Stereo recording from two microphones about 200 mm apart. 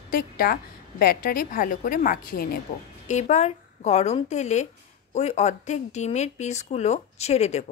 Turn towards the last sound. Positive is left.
turn(degrees=35)  # may be behind; listen again after turning